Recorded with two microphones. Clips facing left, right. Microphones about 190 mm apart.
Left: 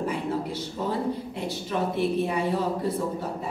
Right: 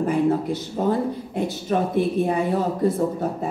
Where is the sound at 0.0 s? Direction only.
50° right (ahead or behind).